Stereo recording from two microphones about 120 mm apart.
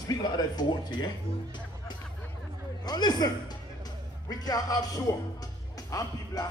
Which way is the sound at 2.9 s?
35° left (ahead or behind).